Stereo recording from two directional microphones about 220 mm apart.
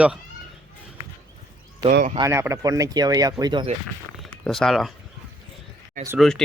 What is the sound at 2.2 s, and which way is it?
Speech, 15° right (ahead or behind).